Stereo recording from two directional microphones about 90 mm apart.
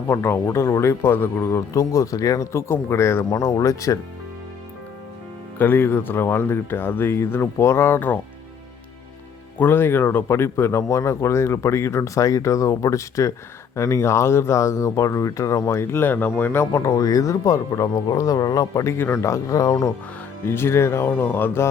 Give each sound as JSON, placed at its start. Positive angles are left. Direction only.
{"t": 0.1, "sound": "speech", "side_deg": 25}
{"t": 5.5, "sound": "speech", "side_deg": 25}
{"t": 9.6, "sound": "speech", "side_deg": 25}
{"t": 16.8, "sound": "speech", "side_deg": 45}
{"t": 20.4, "sound": "speech", "side_deg": 25}